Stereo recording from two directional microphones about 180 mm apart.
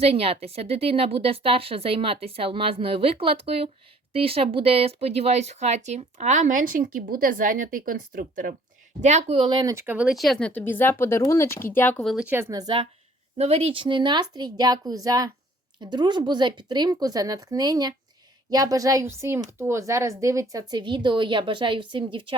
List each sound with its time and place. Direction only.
0.0 s speech: 35° right (ahead or behind); by 8.5 s 50° right (ahead or behind)
9.0 s speech: 40° right (ahead or behind)